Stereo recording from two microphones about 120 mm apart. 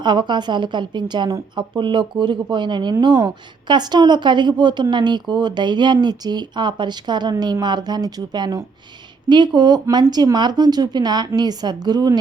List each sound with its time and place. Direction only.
0.0 s a woman's voice: 40° right (ahead or behind)